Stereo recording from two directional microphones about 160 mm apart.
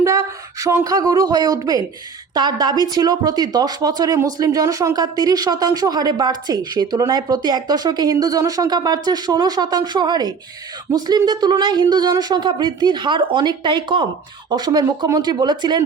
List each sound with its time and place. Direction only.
0.0 s speech: 20° right (ahead or behind)